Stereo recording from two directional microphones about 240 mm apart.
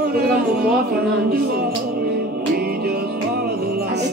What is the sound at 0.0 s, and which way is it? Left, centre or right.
Speech, right.